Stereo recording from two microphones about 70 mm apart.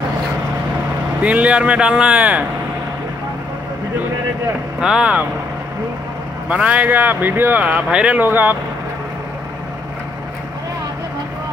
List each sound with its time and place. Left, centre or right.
1.2 s a man's voice: centre
4.7 s a man's voice: centre
6.5 s speech: centre
7.6 s a man's voice: centre
8.2 s speech: right